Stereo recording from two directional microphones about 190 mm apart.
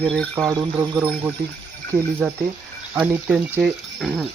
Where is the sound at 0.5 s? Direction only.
15° right (ahead or behind).